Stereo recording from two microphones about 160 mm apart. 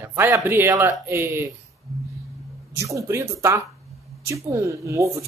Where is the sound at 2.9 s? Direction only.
20° right (ahead or behind).